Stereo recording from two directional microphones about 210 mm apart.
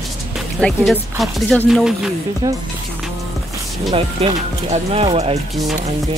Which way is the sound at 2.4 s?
15° right (ahead or behind).